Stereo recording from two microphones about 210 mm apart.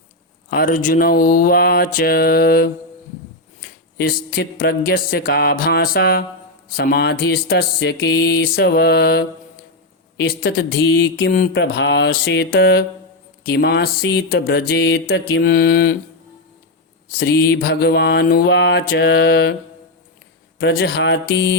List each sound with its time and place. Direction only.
0.5 s mantra: 40° left (ahead or behind)
3.9 s mantra: 45° left (ahead or behind)
17.1 s mantra: 50° left (ahead or behind)
20.6 s mantra: 50° left (ahead or behind)